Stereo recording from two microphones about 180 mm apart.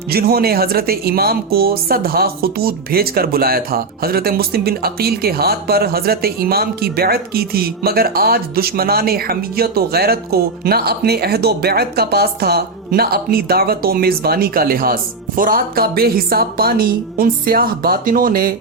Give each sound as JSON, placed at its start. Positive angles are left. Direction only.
{"t": 0.1, "sound": "speech", "side_deg": -60}